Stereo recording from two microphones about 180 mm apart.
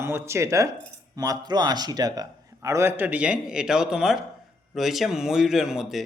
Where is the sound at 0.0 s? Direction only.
15° right (ahead or behind).